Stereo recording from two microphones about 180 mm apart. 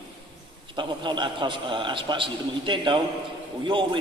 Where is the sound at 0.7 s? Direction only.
25° right (ahead or behind).